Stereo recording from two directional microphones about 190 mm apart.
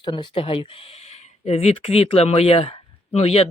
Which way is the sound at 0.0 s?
25° left (ahead or behind).